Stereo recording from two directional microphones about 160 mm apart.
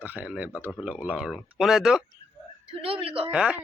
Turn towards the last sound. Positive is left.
turn(degrees=-5)  # may be behind; listen again after turning